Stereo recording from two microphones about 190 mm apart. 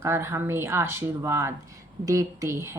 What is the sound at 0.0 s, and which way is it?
A woman's voice, 15° right (ahead or behind).